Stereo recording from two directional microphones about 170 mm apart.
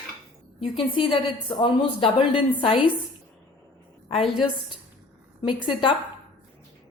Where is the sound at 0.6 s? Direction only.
30° left (ahead or behind).